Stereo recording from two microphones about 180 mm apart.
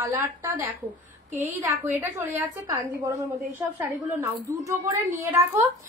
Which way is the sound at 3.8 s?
15° right (ahead or behind).